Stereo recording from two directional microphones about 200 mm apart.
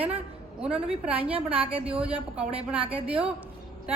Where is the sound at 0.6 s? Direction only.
5° right (ahead or behind).